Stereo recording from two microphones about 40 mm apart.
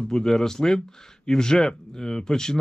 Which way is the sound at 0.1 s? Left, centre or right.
Centre.